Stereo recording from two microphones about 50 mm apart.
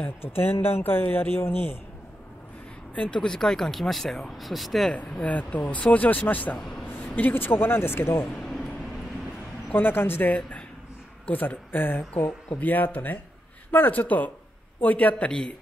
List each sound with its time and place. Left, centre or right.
0.2 s speech: left
3.0 s speech: centre
4.9 s speech: left
9.7 s speech: left